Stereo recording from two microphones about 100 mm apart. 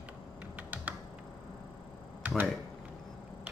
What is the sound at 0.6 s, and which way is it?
Computer keyboard, 15° right (ahead or behind).